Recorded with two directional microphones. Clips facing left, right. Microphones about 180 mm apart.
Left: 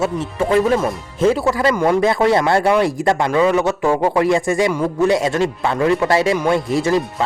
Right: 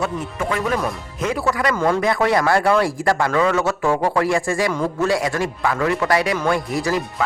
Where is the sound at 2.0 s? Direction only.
25° left (ahead or behind).